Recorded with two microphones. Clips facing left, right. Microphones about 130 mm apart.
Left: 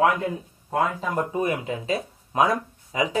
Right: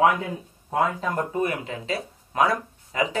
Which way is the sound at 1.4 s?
20° left (ahead or behind).